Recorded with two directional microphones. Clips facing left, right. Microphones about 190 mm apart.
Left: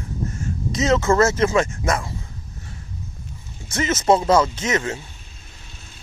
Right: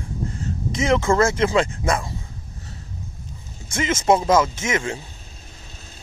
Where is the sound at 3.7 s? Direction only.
15° right (ahead or behind).